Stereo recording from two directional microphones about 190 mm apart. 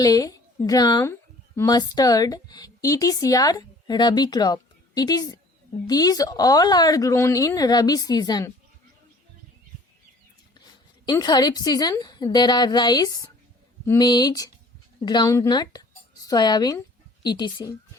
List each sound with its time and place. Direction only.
0.0 s a woman's voice: 20° left (ahead or behind)
11.0 s a woman's voice: 20° left (ahead or behind)